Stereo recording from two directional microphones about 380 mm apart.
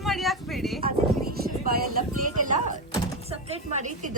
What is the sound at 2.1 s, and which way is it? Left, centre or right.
Music, right.